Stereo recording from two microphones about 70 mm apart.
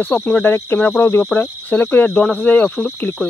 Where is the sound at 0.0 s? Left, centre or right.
Left.